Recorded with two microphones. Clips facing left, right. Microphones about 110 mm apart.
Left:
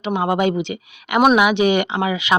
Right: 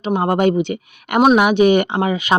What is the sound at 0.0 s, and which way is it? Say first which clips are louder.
Speech: right 3 dB; 40° right (ahead or behind).